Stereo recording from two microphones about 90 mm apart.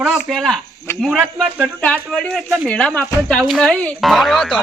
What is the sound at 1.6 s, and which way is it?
Speech, 15° left (ahead or behind).